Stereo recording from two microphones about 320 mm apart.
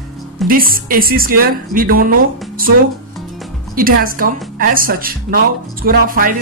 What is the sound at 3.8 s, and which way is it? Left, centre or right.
Speech, right.